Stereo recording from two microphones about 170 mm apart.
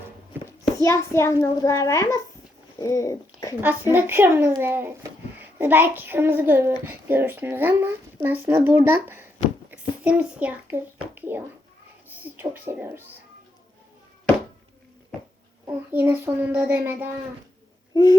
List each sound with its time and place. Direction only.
0.9 s a child's voice: 15° left (ahead or behind)
3.9 s a child's voice: 10° right (ahead or behind)
9.6 s a sound: 10° right (ahead or behind)
12.0 s a woman's voice: 10° right (ahead or behind)
15.6 s a child's voice: 10° right (ahead or behind)
17.9 s babbling: 20° left (ahead or behind)